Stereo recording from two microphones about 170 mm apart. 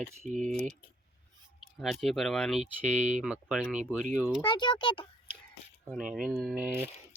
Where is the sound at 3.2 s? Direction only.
5° right (ahead or behind).